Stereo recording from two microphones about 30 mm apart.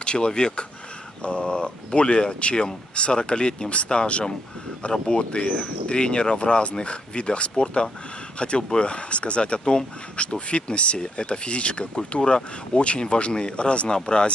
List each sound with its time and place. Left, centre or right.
0.0 s speech: left
7.6 s speech: left
12.2 s speech: left
12.7 s speech: left